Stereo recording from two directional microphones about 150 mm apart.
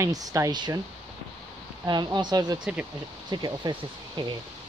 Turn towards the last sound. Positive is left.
turn(degrees=-30)  # may be behind; listen again after turning